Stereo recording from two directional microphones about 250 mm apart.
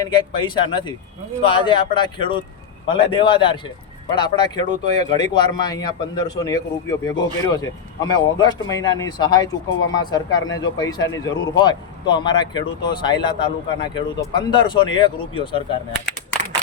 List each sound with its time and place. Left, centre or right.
0.1 s speech: centre